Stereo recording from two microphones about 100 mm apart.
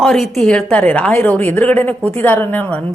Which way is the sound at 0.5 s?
15° left (ahead or behind).